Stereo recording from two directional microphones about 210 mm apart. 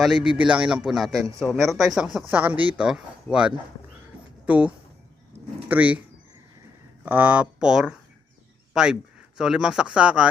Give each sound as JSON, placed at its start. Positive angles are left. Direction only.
{"t": 0.0, "sound": "a man's voice", "side_deg": -5}
{"t": 7.0, "sound": "a man's voice", "side_deg": -10}